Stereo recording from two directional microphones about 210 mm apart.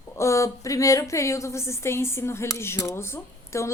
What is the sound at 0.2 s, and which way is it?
A woman's voice, 15° left (ahead or behind).